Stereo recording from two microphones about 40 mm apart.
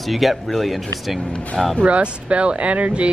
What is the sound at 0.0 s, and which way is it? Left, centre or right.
Speech, centre.